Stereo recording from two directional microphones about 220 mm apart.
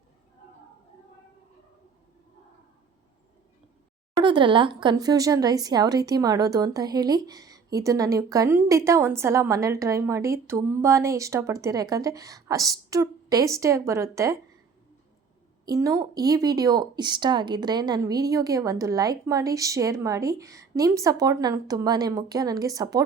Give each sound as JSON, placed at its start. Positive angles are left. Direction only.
{"t": 4.2, "sound": "speech", "side_deg": -20}
{"t": 15.6, "sound": "speech", "side_deg": -15}